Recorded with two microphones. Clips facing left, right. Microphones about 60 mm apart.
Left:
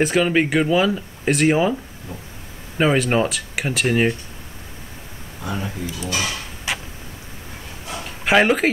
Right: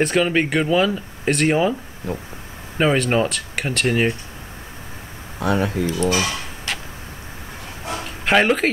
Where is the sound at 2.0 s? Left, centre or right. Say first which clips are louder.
Right 11 dB; right.